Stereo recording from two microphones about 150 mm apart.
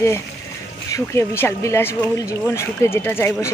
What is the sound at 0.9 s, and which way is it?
Speech, 20° left (ahead or behind).